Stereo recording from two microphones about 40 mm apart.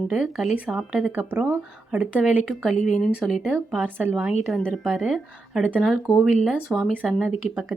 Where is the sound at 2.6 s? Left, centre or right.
Centre.